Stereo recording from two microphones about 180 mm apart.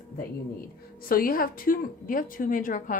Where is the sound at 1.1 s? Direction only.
55° left (ahead or behind).